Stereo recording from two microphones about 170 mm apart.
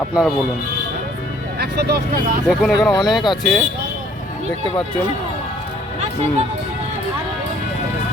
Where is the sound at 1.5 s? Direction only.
70° right (ahead or behind).